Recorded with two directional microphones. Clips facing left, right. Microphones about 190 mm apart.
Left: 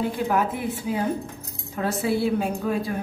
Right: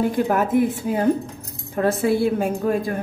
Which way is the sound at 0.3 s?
45° right (ahead or behind).